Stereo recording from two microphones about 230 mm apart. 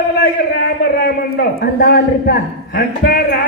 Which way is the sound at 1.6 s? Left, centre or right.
Left.